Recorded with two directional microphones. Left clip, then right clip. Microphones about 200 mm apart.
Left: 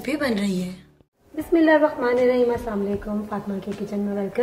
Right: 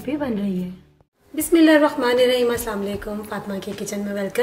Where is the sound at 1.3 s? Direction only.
50° right (ahead or behind).